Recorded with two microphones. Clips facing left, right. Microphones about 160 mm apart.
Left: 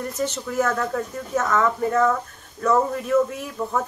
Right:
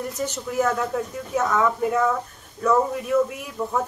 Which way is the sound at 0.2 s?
10° right (ahead or behind).